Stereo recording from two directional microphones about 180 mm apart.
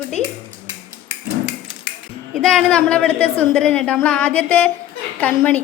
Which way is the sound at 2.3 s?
5° left (ahead or behind).